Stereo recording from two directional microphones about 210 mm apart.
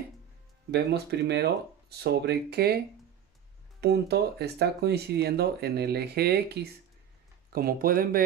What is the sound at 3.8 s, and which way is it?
Speech, 50° right (ahead or behind).